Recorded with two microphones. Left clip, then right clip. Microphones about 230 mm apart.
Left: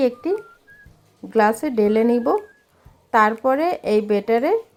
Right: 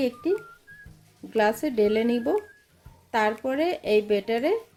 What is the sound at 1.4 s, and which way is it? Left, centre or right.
Speech, centre.